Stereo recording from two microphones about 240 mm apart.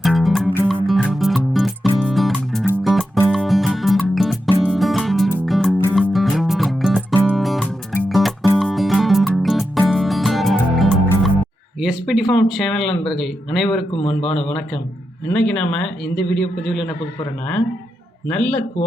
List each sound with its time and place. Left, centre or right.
0.0 s music: centre
11.8 s a sound: centre
12.3 s speech: centre
13.9 s a man's voice: left
15.3 s speech: centre
18.3 s speech: centre